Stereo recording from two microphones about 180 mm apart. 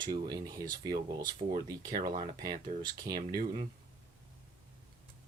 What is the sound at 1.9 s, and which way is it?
Speech, 50° right (ahead or behind).